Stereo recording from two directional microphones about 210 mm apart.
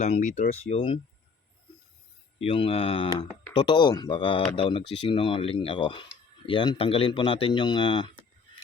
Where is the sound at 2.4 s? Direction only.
25° left (ahead or behind).